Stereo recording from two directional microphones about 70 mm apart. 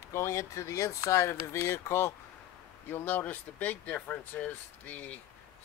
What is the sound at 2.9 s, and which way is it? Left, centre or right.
Speech, left.